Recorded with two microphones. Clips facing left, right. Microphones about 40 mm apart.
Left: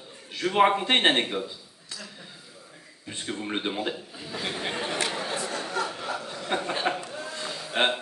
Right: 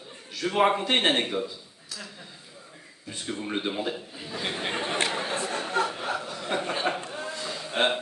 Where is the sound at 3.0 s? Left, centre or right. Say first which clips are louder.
Even; left.